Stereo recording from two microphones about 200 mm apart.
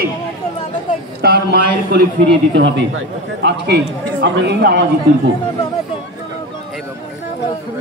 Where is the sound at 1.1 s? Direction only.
55° right (ahead or behind).